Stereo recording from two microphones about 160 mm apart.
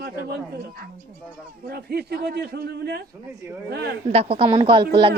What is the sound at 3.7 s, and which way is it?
Speech, 90° right.